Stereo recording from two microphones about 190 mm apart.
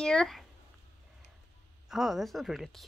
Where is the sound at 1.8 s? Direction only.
Centre (ahead or behind).